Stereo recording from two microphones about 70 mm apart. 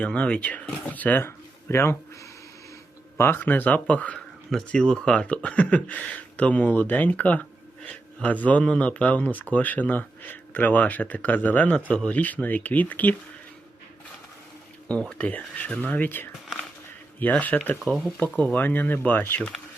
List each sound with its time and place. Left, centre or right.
0.0 s speech: centre
1.6 s speech: left
3.2 s speech: left
15.2 s speech: left
17.8 s speech: centre
18.5 s speech: left
19.4 s speech: centre